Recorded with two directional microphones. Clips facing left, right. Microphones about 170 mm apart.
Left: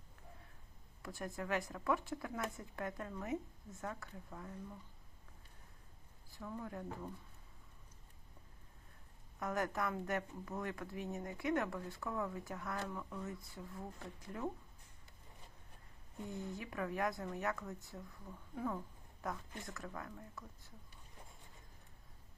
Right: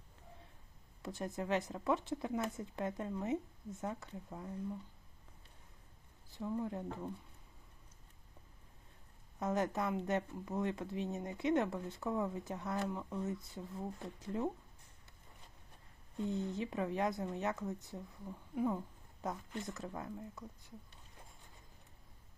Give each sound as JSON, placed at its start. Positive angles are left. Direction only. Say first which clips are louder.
{"t": 1.0, "sound": "speech", "louder": "right 3 dB", "side_deg": -20}
{"t": 6.3, "sound": "speech", "louder": "right 6 dB", "side_deg": -20}
{"t": 9.4, "sound": "speech", "louder": "right 3 dB", "side_deg": -20}
{"t": 16.1, "sound": "speech", "louder": "right 7 dB", "side_deg": -20}